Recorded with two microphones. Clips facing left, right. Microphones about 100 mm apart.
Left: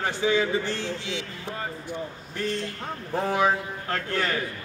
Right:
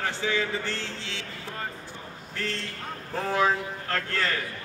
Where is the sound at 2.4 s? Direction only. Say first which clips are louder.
Left 5 dB; 15° left (ahead or behind).